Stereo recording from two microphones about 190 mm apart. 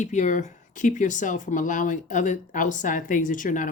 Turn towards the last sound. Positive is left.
turn(degrees=45)  # may be behind; listen again after turning